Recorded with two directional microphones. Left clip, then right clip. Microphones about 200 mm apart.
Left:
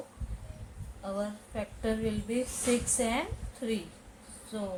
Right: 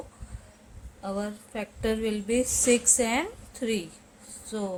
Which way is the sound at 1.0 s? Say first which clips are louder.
Right 2 dB; 50° right (ahead or behind).